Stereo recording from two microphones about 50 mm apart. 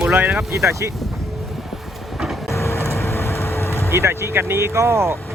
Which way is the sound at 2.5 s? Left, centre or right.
Left.